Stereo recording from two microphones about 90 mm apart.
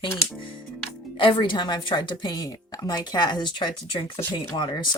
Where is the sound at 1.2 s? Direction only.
70° left (ahead or behind).